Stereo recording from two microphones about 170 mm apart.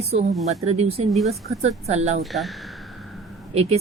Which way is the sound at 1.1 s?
Centre (ahead or behind).